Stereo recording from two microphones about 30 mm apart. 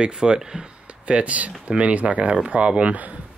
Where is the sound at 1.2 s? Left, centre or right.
Right.